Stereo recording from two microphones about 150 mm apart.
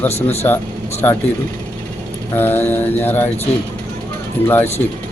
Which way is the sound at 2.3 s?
15° left (ahead or behind).